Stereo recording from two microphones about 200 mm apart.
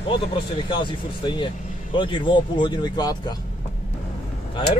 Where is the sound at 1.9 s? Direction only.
25° left (ahead or behind).